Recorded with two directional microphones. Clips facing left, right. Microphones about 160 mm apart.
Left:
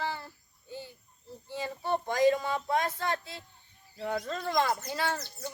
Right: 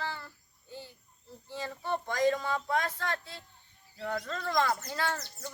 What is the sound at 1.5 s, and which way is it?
Speech, 15° left (ahead or behind).